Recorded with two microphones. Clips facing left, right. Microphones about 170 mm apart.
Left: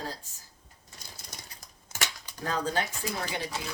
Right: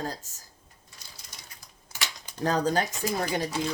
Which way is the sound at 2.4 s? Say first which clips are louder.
Right 5 dB; 40° right (ahead or behind).